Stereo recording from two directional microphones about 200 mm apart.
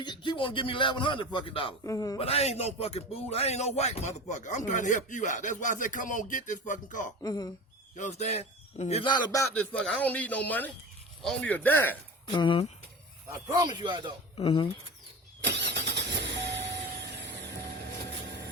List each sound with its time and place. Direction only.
0.0 s a man's voice: 25° left (ahead or behind)
2.1 s a man's voice: 30° left (ahead or behind)
7.2 s a man's voice: 20° left (ahead or behind)
7.9 s a man's voice: 35° left (ahead or behind); by 9.5 s 20° left (ahead or behind)
9.6 s a man's voice: 5° left (ahead or behind)
12.4 s a man's voice: 25° left (ahead or behind)
13.2 s a man's voice: 20° right (ahead or behind)
14.3 s a man's voice: 25° left (ahead or behind)
15.4 s vehicle: 60° right (ahead or behind)